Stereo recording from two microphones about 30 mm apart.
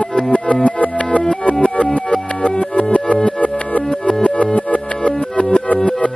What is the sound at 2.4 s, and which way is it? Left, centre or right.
Music, left.